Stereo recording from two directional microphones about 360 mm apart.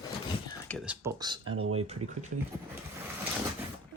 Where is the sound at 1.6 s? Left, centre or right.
Right.